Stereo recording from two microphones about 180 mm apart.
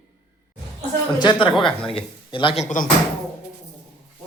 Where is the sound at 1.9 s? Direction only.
30° left (ahead or behind).